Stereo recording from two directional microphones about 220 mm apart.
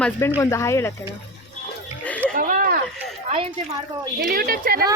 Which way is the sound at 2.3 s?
40° right (ahead or behind).